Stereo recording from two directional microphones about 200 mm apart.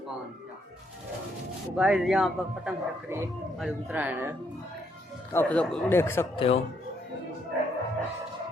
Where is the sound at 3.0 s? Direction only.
10° right (ahead or behind).